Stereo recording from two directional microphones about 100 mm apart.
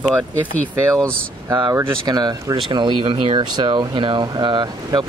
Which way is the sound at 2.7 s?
55° right (ahead or behind).